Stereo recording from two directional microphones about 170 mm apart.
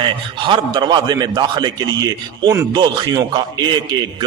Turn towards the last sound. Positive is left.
turn(degrees=-25)  # may be behind; listen again after turning